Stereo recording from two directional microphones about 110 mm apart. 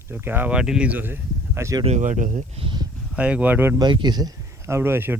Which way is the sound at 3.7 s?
40° right (ahead or behind).